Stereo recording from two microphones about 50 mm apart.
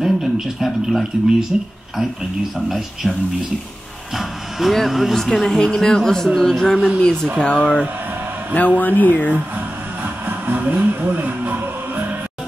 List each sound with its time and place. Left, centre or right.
0.0 s speech: centre
4.2 s speech: centre
5.1 s a man's voice: centre
7.0 s a man's voice: centre
8.5 s speech: left
10.2 s music: right